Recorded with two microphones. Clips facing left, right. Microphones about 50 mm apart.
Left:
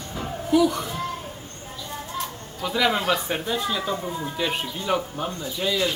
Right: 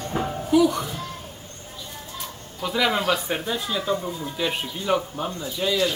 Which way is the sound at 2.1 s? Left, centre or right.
Centre.